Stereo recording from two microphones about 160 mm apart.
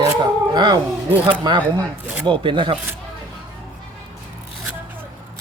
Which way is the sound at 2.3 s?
30° right (ahead or behind).